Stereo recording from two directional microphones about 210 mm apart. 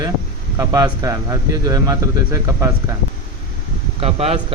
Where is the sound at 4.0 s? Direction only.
30° right (ahead or behind).